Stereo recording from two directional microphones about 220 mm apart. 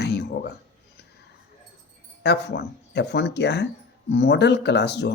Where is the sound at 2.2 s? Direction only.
50° left (ahead or behind).